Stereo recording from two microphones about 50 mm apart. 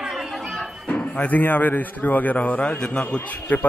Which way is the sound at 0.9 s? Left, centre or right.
Left.